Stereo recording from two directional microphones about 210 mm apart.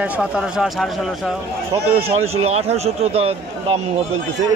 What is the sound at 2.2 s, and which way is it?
Speech, 30° right (ahead or behind).